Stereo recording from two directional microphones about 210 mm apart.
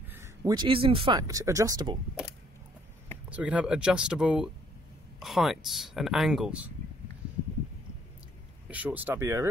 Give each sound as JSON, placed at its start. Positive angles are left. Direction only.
{"t": 0.4, "sound": "speech", "side_deg": -20}
{"t": 3.3, "sound": "speech", "side_deg": -5}
{"t": 8.6, "sound": "speech", "side_deg": -5}